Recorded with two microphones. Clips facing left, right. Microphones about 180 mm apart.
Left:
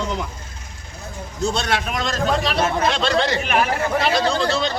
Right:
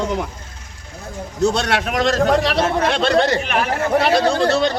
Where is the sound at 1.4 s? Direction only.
70° right (ahead or behind).